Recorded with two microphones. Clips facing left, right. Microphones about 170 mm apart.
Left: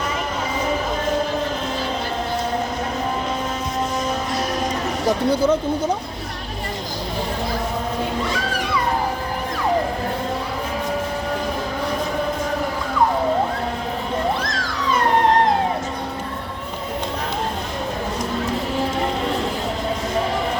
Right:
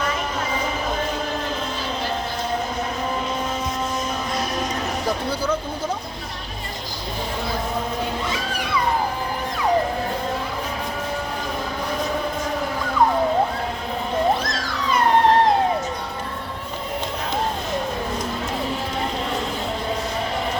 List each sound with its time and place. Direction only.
5.3 s speech: 25° left (ahead or behind)